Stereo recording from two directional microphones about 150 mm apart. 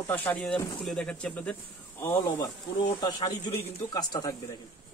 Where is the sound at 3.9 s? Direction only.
25° left (ahead or behind).